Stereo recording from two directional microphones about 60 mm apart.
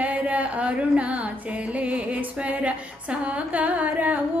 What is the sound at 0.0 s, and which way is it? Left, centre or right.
Music, right.